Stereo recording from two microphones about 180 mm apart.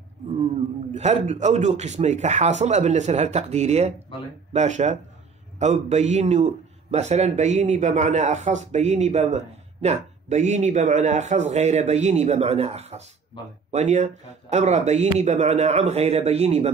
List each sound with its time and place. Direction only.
0.9 s a man's voice: 40° right (ahead or behind)